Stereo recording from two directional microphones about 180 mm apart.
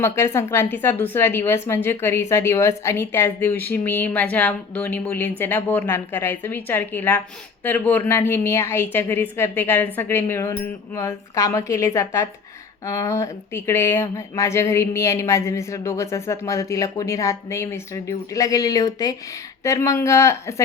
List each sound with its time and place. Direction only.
0.0 s speech: 15° left (ahead or behind)